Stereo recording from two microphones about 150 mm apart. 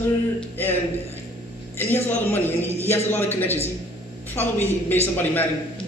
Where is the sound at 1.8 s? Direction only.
15° left (ahead or behind).